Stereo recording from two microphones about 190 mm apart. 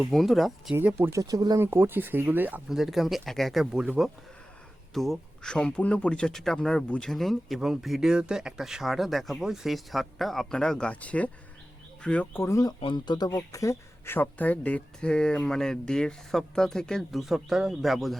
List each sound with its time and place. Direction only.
0.0 s speech: centre (ahead or behind)